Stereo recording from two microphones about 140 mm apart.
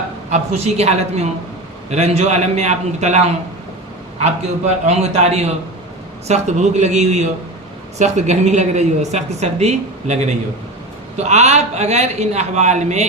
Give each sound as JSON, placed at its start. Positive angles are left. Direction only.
{"t": 0.3, "sound": "a man's voice", "side_deg": -50}